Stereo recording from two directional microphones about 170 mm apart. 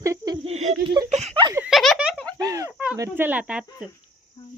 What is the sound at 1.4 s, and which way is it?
Snicker, 25° right (ahead or behind).